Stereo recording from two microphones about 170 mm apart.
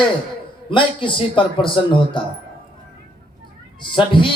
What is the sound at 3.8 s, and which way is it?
Speech, 30° left (ahead or behind).